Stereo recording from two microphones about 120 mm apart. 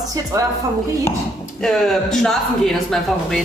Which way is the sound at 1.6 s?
5° left (ahead or behind).